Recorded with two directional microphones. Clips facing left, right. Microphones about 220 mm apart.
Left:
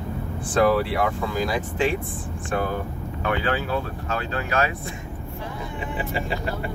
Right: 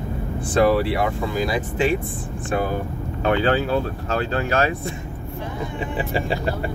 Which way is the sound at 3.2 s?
30° right (ahead or behind).